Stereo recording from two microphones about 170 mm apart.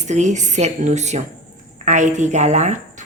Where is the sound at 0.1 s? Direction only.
45° right (ahead or behind).